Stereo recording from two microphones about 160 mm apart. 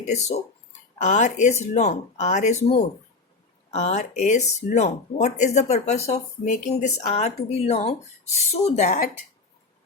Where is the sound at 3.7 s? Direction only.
45° left (ahead or behind).